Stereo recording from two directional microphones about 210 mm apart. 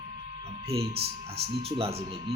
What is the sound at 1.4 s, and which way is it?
Speech, 25° right (ahead or behind).